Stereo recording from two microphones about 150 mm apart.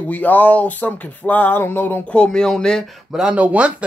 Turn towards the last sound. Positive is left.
turn(degrees=-10)  # may be behind; listen again after turning